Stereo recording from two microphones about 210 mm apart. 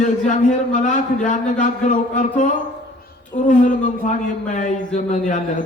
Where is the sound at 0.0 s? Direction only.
35° left (ahead or behind).